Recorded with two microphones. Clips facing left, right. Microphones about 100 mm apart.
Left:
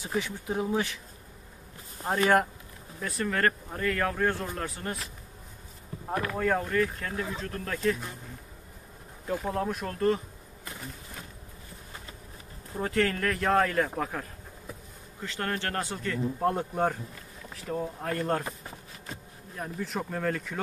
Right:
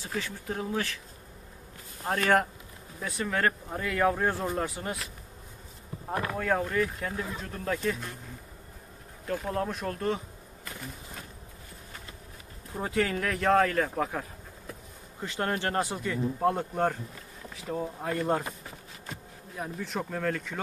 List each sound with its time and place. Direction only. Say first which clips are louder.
0.0 s speech: left 3 dB; 15° left (ahead or behind)
2.0 s a man's voice: left 1 dB; 5° left (ahead or behind); by 4.9 s 10° right (ahead or behind)
6.3 s speech: left 1 dB; centre (ahead or behind)
9.2 s speech: left 1 dB; 5° left (ahead or behind)
12.7 s speech: left 1 dB; 5° right (ahead or behind)
15.1 s a man's voice: right 2 dB; 20° right (ahead or behind)
19.5 s speech: even; centre (ahead or behind)